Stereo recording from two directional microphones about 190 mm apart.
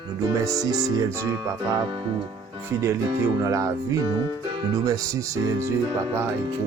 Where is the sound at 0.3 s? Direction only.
15° right (ahead or behind).